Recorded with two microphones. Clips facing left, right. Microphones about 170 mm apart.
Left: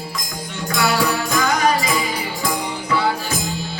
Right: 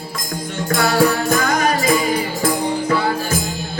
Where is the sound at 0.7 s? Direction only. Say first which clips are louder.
Right 4 dB; 50° right (ahead or behind).